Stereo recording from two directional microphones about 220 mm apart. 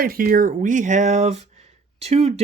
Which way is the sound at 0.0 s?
40° right (ahead or behind).